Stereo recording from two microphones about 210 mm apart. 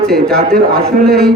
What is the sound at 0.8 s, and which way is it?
Speech, 50° right (ahead or behind).